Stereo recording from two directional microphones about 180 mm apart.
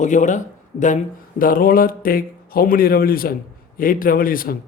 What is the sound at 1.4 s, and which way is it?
A man's voice, 50° left (ahead or behind).